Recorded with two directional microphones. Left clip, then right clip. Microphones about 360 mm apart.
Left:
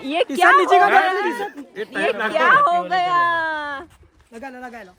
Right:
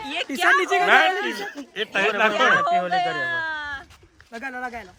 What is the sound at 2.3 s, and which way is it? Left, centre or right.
Speech, centre.